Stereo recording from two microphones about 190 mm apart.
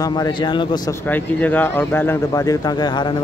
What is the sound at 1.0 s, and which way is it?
Speech, 10° left (ahead or behind).